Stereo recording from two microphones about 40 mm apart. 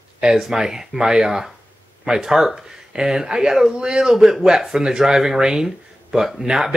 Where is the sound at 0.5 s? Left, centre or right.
Centre.